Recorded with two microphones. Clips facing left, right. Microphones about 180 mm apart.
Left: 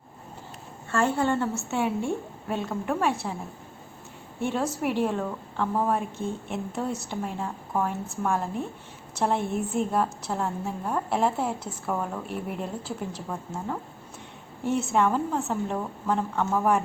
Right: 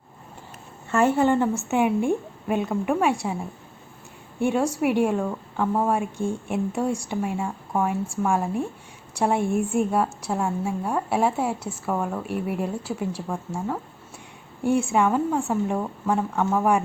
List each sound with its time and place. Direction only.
0.9 s a woman's voice: 15° right (ahead or behind)
4.4 s a woman's voice: 10° right (ahead or behind)